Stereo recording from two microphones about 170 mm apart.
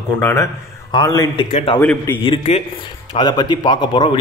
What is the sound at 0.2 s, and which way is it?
A man's voice, 15° left (ahead or behind).